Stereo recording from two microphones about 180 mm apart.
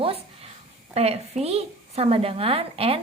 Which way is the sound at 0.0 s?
30° right (ahead or behind).